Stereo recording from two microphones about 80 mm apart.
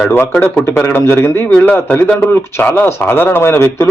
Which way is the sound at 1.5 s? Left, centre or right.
Centre.